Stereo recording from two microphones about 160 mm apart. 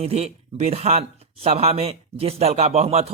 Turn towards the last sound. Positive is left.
turn(degrees=-40)  # may be behind; listen again after turning